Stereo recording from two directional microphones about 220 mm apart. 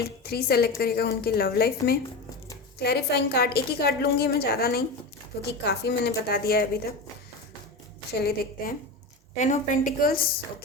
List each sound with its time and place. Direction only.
0.2 s a woman's voice: 45° left (ahead or behind)
8.2 s a woman's voice: 45° left (ahead or behind)
9.3 s a woman's voice: 35° left (ahead or behind)